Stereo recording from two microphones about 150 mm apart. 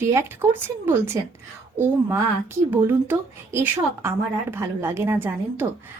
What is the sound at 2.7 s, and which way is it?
A woman's voice, 15° right (ahead or behind).